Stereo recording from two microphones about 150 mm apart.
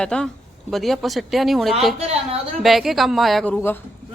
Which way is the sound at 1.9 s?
45° right (ahead or behind).